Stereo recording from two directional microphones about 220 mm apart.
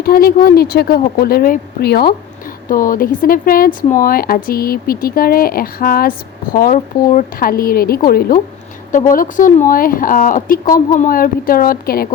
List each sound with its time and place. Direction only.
0.0 s a woman's voice: 45° left (ahead or behind)